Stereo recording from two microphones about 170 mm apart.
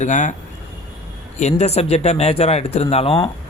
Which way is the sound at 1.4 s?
40° left (ahead or behind).